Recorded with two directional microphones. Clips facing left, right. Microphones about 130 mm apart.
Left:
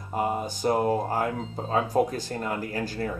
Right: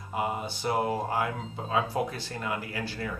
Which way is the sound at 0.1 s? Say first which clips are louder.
Left 4 dB; 40° left (ahead or behind).